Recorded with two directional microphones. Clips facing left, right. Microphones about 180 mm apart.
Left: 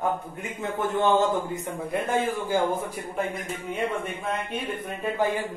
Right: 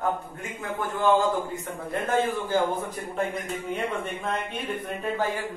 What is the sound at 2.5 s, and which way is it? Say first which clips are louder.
Speech: even; 10° left (ahead or behind).